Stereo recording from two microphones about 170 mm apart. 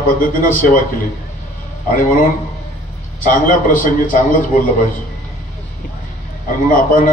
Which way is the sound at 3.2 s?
50° left (ahead or behind).